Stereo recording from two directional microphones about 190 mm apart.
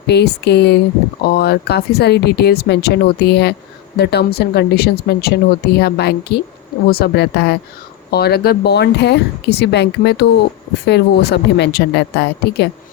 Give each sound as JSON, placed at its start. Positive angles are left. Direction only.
{"t": 0.1, "sound": "speech", "side_deg": 60}